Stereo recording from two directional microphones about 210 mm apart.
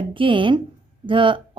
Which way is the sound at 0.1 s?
25° right (ahead or behind).